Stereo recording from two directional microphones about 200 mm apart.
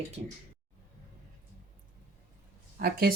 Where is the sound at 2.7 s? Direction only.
45° right (ahead or behind).